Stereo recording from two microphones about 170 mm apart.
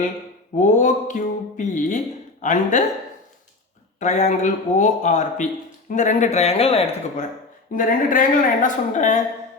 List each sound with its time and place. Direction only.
0.6 s speech: 45° left (ahead or behind)
4.0 s speech: 45° left (ahead or behind)
7.8 s speech: 55° left (ahead or behind)